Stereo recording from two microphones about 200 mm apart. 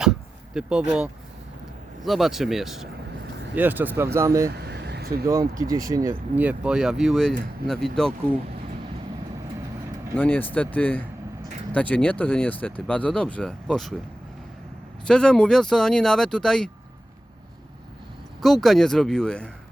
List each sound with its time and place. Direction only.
0.0 s a sound: 5° right (ahead or behind)
2.0 s speech: centre (ahead or behind)
4.5 s vehicle: 55° right (ahead or behind)
5.3 s speech: 20° right (ahead or behind); by 7.9 s centre (ahead or behind)
10.2 s speech: 10° left (ahead or behind)
15.0 s speech: 5° left (ahead or behind)
18.4 s speech: centre (ahead or behind)